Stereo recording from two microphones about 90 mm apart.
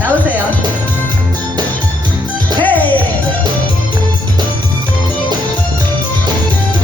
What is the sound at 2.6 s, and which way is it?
Music, 20° left (ahead or behind).